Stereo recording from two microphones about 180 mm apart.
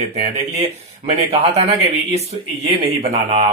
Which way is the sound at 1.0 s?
35° right (ahead or behind).